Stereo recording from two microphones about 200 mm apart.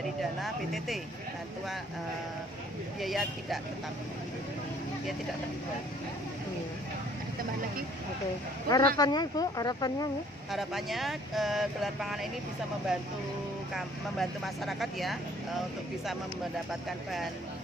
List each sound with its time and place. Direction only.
0.4 s speech: centre (ahead or behind)
3.0 s speech: centre (ahead or behind)
8.6 s speech: 20° left (ahead or behind)
10.5 s speech: centre (ahead or behind)
13.7 s speech: centre (ahead or behind)